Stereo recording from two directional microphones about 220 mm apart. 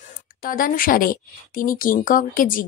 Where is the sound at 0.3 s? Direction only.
40° left (ahead or behind).